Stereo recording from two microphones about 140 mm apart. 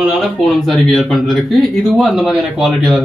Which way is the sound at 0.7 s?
Centre (ahead or behind).